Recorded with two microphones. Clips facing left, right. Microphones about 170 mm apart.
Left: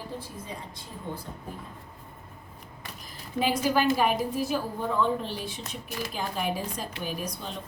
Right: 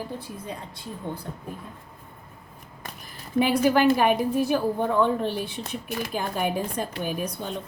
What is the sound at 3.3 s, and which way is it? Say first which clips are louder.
A woman's voice: right 5 dB; 60° right (ahead or behind).